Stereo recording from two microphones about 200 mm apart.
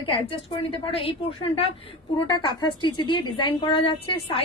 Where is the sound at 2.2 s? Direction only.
25° left (ahead or behind).